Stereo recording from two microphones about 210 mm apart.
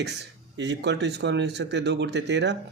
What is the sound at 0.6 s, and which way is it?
Speech, 55° right (ahead or behind).